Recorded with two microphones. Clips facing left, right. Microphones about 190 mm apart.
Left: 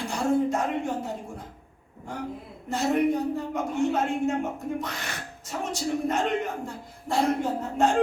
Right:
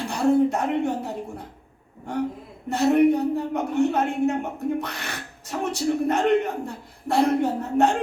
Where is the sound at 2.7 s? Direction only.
65° right (ahead or behind).